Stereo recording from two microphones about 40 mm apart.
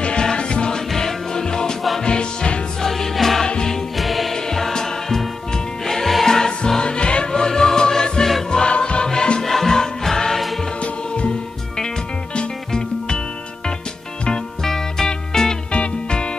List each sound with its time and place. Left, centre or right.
0.0 s music: left
0.7 s music: centre
2.8 s music: centre
4.5 s music: centre
6.8 s music: left
10.8 s music: left
12.4 s music: centre
14.6 s music: centre
15.7 s music: left